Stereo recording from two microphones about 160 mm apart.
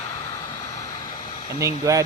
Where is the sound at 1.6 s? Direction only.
20° right (ahead or behind).